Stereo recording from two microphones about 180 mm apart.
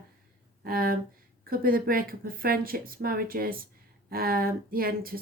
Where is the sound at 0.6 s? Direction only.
55° right (ahead or behind).